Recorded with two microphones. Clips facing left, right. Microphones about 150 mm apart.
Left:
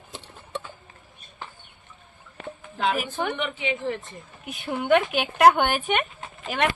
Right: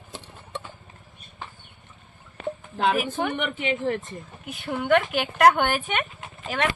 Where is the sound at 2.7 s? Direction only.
50° right (ahead or behind).